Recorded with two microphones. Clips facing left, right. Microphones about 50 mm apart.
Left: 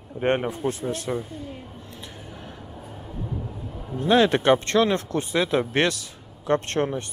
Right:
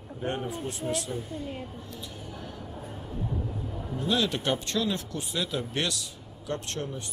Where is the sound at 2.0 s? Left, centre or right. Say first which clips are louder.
Left 1 dB; left.